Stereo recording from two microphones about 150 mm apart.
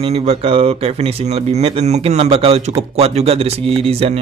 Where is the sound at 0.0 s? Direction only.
40° right (ahead or behind).